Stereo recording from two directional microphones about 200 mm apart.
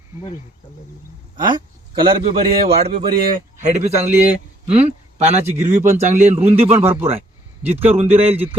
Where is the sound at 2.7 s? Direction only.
30° right (ahead or behind).